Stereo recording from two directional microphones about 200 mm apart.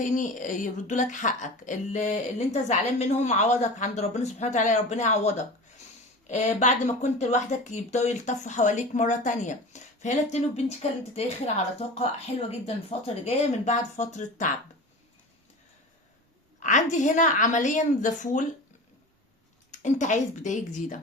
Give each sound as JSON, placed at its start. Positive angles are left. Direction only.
{"t": 0.0, "sound": "speech", "side_deg": 40}
{"t": 16.6, "sound": "speech", "side_deg": 40}
{"t": 19.7, "sound": "speech", "side_deg": 35}